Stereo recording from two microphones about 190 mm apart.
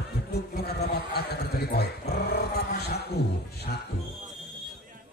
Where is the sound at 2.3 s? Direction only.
55° left (ahead or behind).